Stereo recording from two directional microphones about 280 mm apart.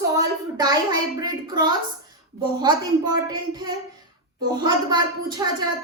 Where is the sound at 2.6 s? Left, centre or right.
Centre.